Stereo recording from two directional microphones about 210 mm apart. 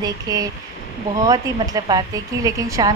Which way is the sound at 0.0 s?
15° right (ahead or behind).